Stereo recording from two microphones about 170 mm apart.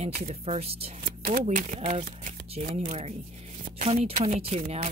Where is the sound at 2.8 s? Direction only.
40° right (ahead or behind).